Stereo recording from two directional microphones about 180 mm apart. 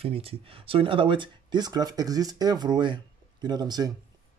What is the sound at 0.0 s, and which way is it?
Speech, 30° right (ahead or behind).